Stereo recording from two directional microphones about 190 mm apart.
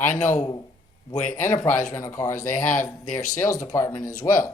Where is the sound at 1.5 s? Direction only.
40° left (ahead or behind).